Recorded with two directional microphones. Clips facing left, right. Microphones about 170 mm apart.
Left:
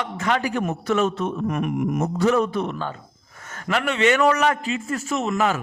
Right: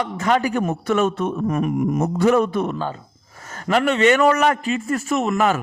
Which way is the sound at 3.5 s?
35° right (ahead or behind).